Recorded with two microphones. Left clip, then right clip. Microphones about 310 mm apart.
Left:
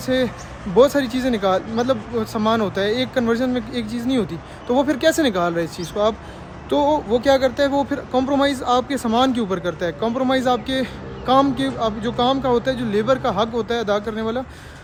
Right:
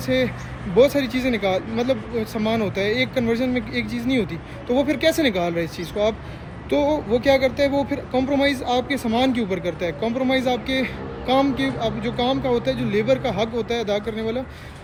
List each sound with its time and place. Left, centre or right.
0.0 s speech: centre